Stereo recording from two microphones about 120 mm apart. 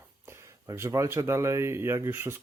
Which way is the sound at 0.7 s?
25° right (ahead or behind).